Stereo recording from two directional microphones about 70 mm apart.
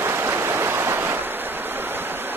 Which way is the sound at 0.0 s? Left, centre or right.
Right.